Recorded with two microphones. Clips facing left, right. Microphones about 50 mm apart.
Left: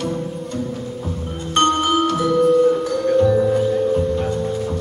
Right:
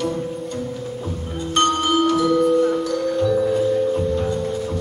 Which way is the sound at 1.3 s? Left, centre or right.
Left.